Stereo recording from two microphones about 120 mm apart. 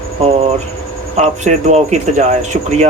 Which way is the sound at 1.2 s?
70° right (ahead or behind).